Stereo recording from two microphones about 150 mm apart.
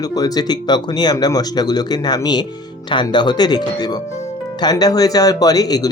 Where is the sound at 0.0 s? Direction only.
25° left (ahead or behind).